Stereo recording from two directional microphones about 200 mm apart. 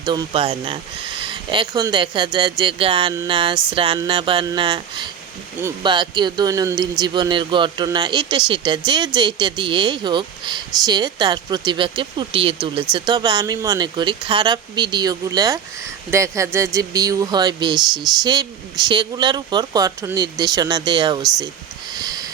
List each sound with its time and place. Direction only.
0.0 s speech: 20° right (ahead or behind)
17.7 s speech: 5° right (ahead or behind)
18.2 s speech: 20° right (ahead or behind)
21.9 s a sound: 20° right (ahead or behind)